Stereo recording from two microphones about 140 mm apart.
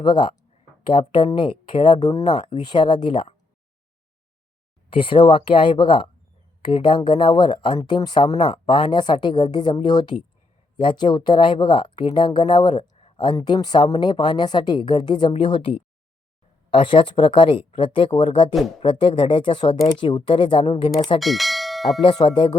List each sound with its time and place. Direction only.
0.0 s speech: 35° left (ahead or behind)
4.9 s a woman's voice: 35° left (ahead or behind)
21.2 s bell: centre (ahead or behind)
22.0 s speech: 35° left (ahead or behind)